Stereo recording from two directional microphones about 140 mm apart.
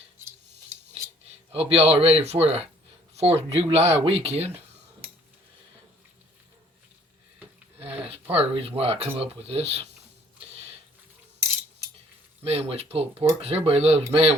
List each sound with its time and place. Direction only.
1.5 s speech: 45° right (ahead or behind)
7.8 s speech: 45° right (ahead or behind)
12.5 s speech: 45° right (ahead or behind)